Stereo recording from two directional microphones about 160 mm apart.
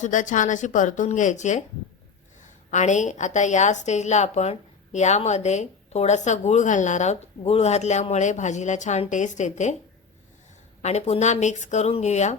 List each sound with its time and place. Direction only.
0.0 s a woman's voice: 50° left (ahead or behind)
2.6 s a woman's voice: 50° left (ahead or behind)
10.8 s a woman's voice: 45° left (ahead or behind)